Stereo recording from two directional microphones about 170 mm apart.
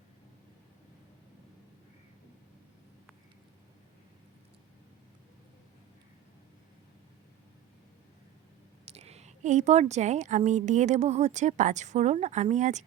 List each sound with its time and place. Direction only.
8.8 s a woman's voice: 35° right (ahead or behind)